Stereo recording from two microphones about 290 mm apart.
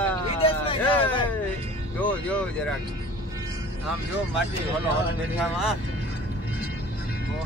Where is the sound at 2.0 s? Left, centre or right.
Centre.